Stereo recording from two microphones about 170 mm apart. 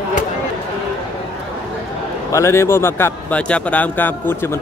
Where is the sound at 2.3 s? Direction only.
15° left (ahead or behind).